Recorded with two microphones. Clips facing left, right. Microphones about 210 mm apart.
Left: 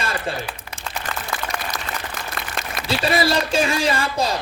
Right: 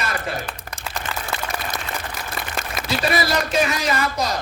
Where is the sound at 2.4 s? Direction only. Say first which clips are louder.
Right 3 dB; centre (ahead or behind).